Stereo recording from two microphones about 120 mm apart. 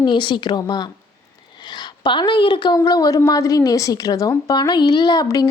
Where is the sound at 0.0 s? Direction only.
40° left (ahead or behind).